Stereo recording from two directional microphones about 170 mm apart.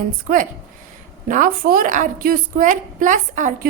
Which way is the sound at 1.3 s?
55° right (ahead or behind).